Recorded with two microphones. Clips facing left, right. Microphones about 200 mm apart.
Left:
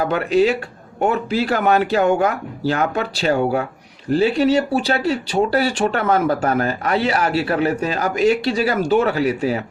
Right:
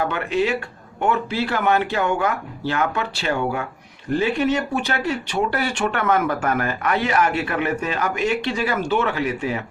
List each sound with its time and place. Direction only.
0.1 s speech: 40° left (ahead or behind)